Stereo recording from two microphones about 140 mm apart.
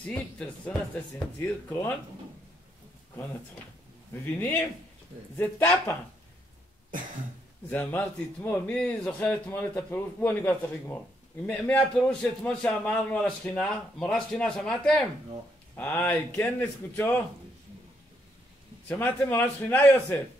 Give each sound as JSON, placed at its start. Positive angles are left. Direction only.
{"t": 0.0, "sound": "a man's voice", "side_deg": 10}
{"t": 4.4, "sound": "a man's voice", "side_deg": 15}
{"t": 7.7, "sound": "a man's voice", "side_deg": 10}
{"t": 15.7, "sound": "a man's voice", "side_deg": 15}
{"t": 18.9, "sound": "a man's voice", "side_deg": 15}